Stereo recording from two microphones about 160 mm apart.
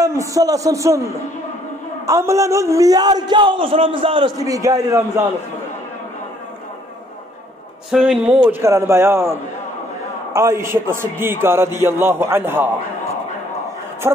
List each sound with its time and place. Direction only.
0.0 s a man's voice: 20° right (ahead or behind)
7.9 s speech: 5° right (ahead or behind)
8.5 s a man's voice: 15° right (ahead or behind)
14.0 s a man's voice: 15° right (ahead or behind)